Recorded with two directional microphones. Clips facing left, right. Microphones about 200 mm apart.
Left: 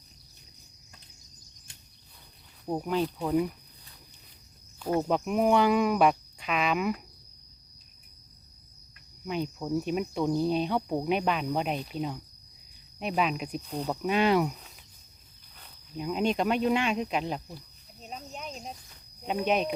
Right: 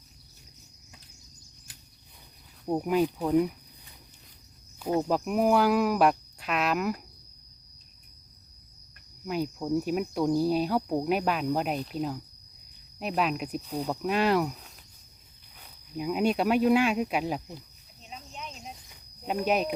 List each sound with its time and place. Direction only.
2.6 s speech: 10° right (ahead or behind)
4.9 s speech: centre (ahead or behind)
9.2 s speech: 5° right (ahead or behind)
18.0 s cricket: 45° left (ahead or behind)
19.5 s speech: 5° right (ahead or behind)